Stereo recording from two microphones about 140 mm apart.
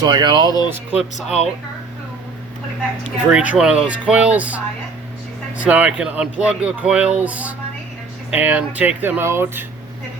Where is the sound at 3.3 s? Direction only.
10° right (ahead or behind).